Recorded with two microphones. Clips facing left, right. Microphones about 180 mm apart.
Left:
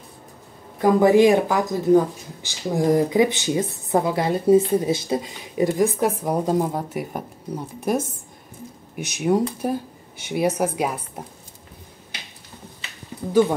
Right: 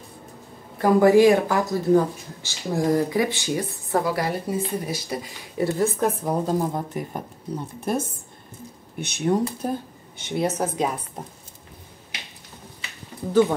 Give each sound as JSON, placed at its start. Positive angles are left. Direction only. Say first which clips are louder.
{"t": 0.7, "sound": "speech", "louder": "even", "side_deg": 20}
{"t": 13.3, "sound": "speech", "louder": "left 1 dB", "side_deg": 10}